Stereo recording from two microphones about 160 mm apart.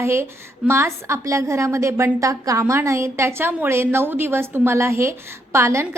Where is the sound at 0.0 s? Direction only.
15° right (ahead or behind).